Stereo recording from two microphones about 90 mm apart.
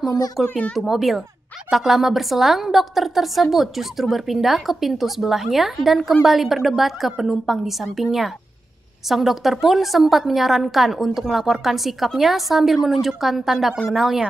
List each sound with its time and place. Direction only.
0.4 s a woman's voice: centre (ahead or behind)